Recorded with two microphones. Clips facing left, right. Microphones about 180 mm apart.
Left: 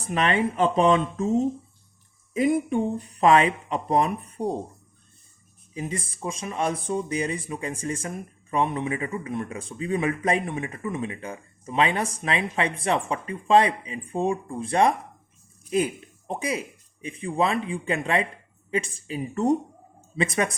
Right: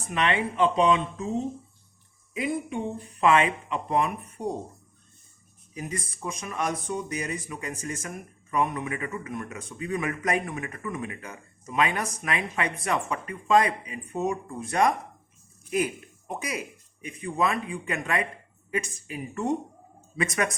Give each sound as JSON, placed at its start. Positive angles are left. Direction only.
{"t": 0.0, "sound": "speech", "side_deg": 40}
{"t": 5.7, "sound": "speech", "side_deg": 25}